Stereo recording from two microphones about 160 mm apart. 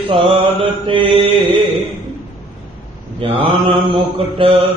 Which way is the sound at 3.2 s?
35° right (ahead or behind).